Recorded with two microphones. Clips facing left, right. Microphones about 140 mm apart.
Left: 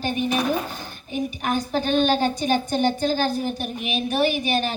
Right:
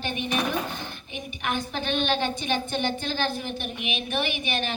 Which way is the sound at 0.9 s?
40° left (ahead or behind).